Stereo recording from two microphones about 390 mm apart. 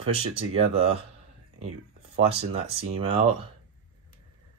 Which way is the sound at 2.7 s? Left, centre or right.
Centre.